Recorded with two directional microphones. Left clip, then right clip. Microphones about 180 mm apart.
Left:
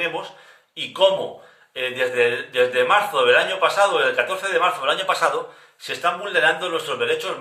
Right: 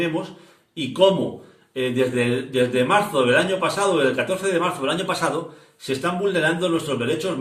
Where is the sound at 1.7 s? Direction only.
20° left (ahead or behind).